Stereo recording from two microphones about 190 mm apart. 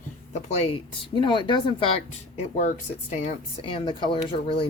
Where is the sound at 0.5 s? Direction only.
30° left (ahead or behind).